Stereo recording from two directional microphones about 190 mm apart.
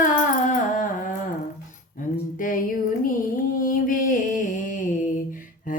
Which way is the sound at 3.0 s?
45° left (ahead or behind).